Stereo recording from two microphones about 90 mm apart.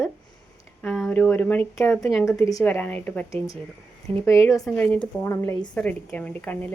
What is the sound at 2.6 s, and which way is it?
Speech, 15° left (ahead or behind).